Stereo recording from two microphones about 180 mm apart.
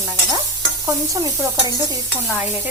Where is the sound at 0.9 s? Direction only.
20° right (ahead or behind).